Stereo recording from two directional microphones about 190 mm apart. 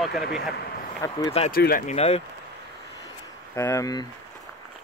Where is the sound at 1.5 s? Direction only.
50° left (ahead or behind); by 2.2 s 35° left (ahead or behind).